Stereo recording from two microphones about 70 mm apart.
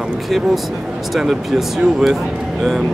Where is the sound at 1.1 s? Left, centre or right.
Centre.